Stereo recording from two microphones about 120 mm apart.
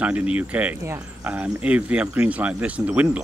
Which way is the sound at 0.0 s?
10° right (ahead or behind).